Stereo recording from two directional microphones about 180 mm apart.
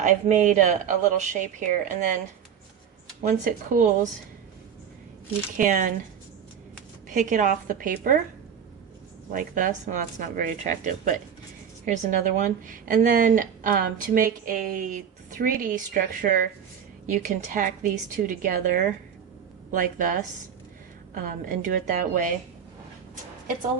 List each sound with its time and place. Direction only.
0.0 s a woman's voice: 45° right (ahead or behind)
5.5 s a woman's voice: 45° right (ahead or behind)
7.1 s a woman's voice: 45° right (ahead or behind)
9.3 s a woman's voice: 50° right (ahead or behind)
21.2 s a woman's voice: 50° right (ahead or behind)